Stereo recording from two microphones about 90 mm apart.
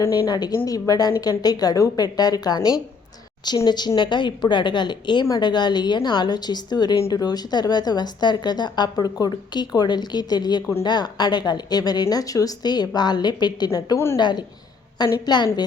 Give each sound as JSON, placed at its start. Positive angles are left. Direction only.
{"t": 0.0, "sound": "a woman's voice", "side_deg": 35}
{"t": 3.7, "sound": "a woman's voice", "side_deg": 55}
{"t": 13.9, "sound": "a woman's voice", "side_deg": 30}
{"t": 14.2, "sound": "a woman's voice", "side_deg": 55}